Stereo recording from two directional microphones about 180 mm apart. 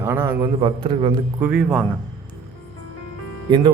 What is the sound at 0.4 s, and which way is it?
Speech, 30° right (ahead or behind).